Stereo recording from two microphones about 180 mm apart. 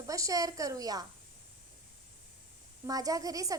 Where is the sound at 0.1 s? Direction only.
20° right (ahead or behind).